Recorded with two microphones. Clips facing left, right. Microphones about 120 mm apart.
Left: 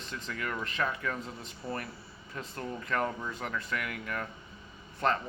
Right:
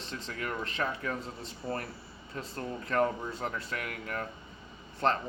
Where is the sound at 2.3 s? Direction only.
35° right (ahead or behind).